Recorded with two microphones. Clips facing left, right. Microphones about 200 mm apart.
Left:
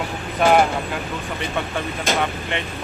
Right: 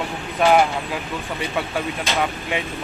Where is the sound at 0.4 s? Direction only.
Centre (ahead or behind).